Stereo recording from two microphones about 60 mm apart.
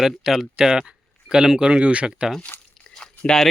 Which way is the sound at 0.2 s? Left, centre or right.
Centre.